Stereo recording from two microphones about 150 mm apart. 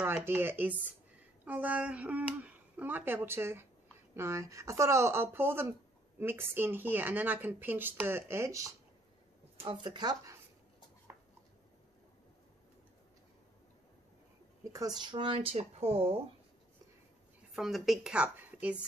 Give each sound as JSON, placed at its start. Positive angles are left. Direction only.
{"t": 0.0, "sound": "speech", "side_deg": -15}
{"t": 9.6, "sound": "speech", "side_deg": -30}
{"t": 14.6, "sound": "a sound", "side_deg": -20}
{"t": 15.0, "sound": "speech", "side_deg": -30}
{"t": 17.6, "sound": "speech", "side_deg": 0}